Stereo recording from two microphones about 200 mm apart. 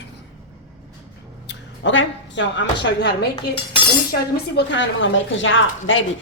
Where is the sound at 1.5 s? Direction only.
70° left (ahead or behind).